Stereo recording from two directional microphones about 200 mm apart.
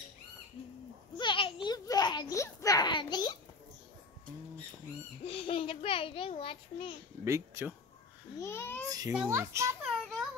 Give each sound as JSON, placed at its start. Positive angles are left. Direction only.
{"t": 1.1, "sound": "a sound", "side_deg": 25}
{"t": 5.2, "sound": "a child's voice", "side_deg": 30}
{"t": 7.2, "sound": "a child's voice", "side_deg": -15}
{"t": 8.4, "sound": "a child's voice", "side_deg": 10}
{"t": 9.1, "sound": "a child's voice", "side_deg": -10}